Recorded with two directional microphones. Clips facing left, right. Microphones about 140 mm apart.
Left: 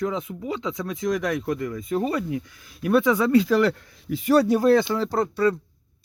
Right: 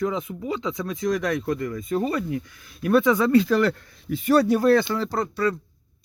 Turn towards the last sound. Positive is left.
turn(degrees=25)  # may be behind; listen again after turning